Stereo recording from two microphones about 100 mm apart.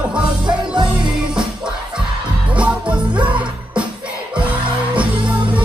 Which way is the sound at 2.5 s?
10° right (ahead or behind).